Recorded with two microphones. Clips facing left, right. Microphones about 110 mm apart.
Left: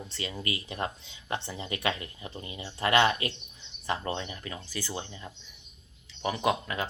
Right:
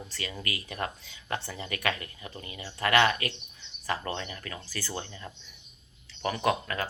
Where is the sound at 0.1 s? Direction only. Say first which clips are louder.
Left 2 dB; 25° left (ahead or behind).